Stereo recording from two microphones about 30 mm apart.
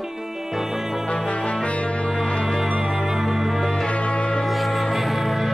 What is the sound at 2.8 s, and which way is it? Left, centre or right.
Music, centre.